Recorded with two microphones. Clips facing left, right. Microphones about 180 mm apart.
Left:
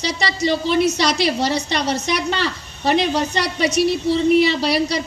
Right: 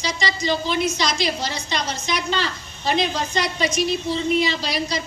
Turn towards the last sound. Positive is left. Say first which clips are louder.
# left 6 dB
turn(degrees=65)  # may be behind; listen again after turning